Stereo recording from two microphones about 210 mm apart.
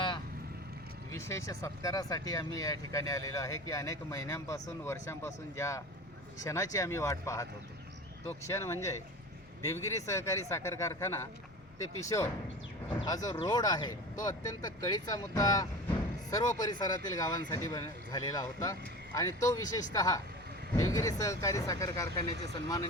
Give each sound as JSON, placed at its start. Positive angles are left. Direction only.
{"t": 1.1, "sound": "speech", "side_deg": 15}
{"t": 8.4, "sound": "speech", "side_deg": 10}
{"t": 10.1, "sound": "speech", "side_deg": 15}